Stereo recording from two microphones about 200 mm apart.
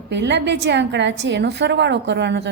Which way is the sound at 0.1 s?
60° right (ahead or behind).